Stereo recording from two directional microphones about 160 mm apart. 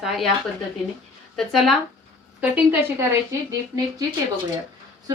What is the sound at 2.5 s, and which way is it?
Speech, 10° right (ahead or behind).